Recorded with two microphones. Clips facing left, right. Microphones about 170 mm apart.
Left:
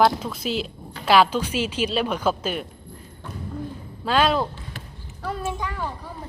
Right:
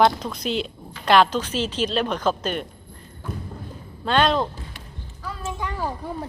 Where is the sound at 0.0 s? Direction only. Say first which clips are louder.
Even; 5° left (ahead or behind).